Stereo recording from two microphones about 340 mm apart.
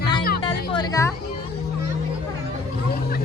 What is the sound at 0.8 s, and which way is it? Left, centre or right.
Music, centre.